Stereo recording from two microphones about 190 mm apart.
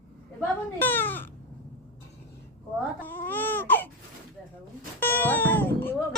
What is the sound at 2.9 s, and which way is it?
Baby cry, 10° left (ahead or behind).